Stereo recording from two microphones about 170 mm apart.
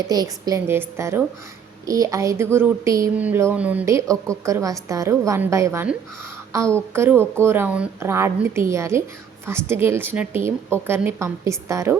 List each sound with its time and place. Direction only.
0.1 s speech: 20° right (ahead or behind)